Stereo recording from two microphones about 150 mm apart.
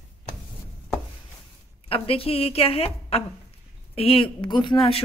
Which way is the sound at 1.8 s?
40° left (ahead or behind).